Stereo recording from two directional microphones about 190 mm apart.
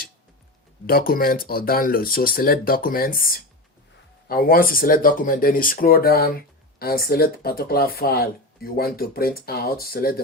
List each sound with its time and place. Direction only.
0.9 s speech: 50° left (ahead or behind)